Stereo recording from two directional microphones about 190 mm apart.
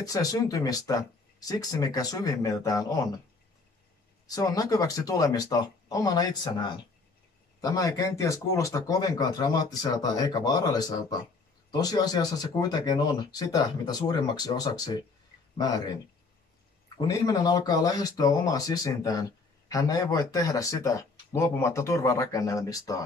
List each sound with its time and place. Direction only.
0.0 s speech: 20° left (ahead or behind)
4.4 s speech: 20° left (ahead or behind)
16.9 s speech: 20° left (ahead or behind)